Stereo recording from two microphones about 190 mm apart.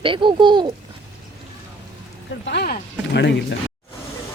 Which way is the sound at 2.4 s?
60° left (ahead or behind).